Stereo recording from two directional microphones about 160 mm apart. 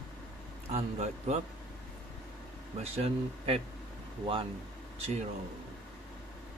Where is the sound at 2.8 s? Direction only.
40° right (ahead or behind).